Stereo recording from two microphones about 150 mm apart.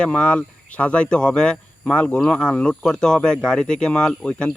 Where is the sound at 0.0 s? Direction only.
5° left (ahead or behind).